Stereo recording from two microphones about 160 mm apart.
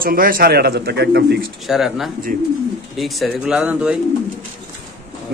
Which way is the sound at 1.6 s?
Centre (ahead or behind).